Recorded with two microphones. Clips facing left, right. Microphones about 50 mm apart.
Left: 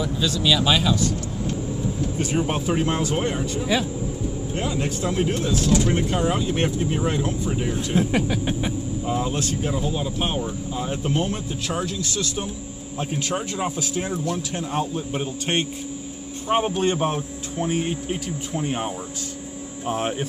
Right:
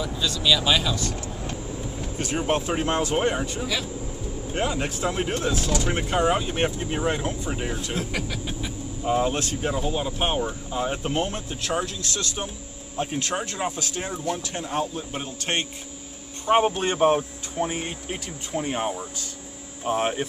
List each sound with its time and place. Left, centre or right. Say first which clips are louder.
0.0 s speech: left 3 dB; centre
2.1 s speech: right 2 dB; centre
3.3 s speech: left 2 dB; centre
7.7 s speech: left 7 dB; left
9.0 s speech: right 4 dB; centre
9.3 s speech: left 1 dB; centre
14.7 s speech: left 1 dB; centre
17.6 s speech: left 3 dB; centre